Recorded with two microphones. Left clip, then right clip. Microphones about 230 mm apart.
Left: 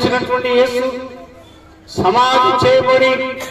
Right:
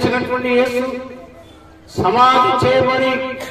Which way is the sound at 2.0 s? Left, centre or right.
Left.